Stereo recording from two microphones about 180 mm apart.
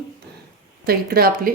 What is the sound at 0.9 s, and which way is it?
Speech, 55° right (ahead or behind).